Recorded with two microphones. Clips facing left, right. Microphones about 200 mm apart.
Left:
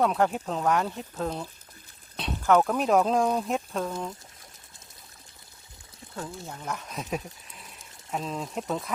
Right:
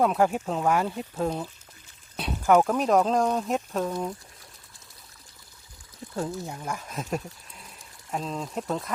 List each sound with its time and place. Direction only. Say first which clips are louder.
0.0 s speech: right 2 dB; centre (ahead or behind)
2.1 s a sound: right 2 dB; 10° right (ahead or behind)
2.7 s speech: right 1 dB; centre (ahead or behind)
6.1 s speech: right 6 dB; 25° right (ahead or behind)
6.5 s speech: right 1 dB; 5° right (ahead or behind)
7.5 s sheep: even; centre (ahead or behind)